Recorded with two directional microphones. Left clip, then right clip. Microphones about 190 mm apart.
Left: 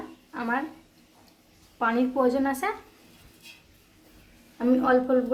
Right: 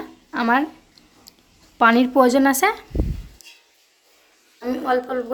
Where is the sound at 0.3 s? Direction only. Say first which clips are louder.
Right 10 dB; 55° right (ahead or behind).